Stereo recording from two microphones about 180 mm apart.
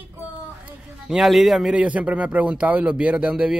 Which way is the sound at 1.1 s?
Centre (ahead or behind).